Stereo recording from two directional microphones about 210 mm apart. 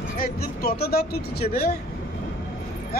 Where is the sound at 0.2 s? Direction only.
50° left (ahead or behind).